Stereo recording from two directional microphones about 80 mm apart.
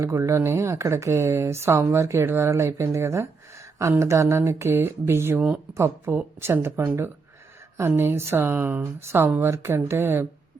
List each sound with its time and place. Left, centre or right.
0.0 s speech: right